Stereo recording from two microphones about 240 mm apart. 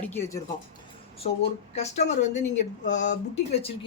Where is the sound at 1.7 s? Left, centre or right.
Left.